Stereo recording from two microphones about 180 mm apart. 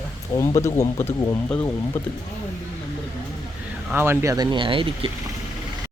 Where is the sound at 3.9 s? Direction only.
10° right (ahead or behind); by 5.1 s 30° right (ahead or behind).